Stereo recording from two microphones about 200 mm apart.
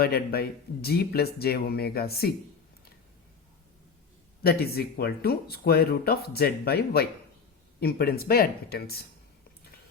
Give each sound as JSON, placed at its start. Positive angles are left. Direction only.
{"t": 0.0, "sound": "speech", "side_deg": 50}
{"t": 4.4, "sound": "speech", "side_deg": 50}